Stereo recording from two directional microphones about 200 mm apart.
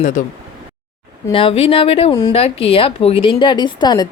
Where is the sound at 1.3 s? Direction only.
25° left (ahead or behind).